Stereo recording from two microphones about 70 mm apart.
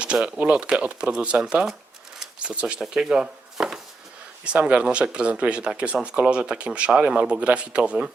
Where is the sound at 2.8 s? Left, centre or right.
Centre.